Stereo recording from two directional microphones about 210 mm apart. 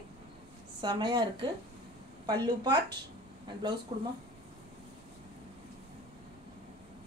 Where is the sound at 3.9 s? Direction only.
30° right (ahead or behind).